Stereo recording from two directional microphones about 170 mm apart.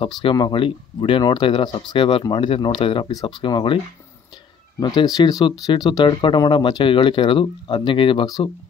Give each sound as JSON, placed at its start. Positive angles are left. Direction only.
{"t": 0.0, "sound": "speech", "side_deg": 30}